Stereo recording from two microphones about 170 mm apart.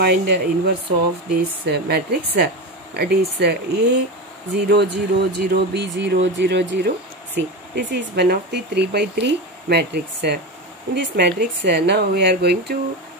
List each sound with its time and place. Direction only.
0.0 s speech: 75° right (ahead or behind)
4.6 s speech: 90° right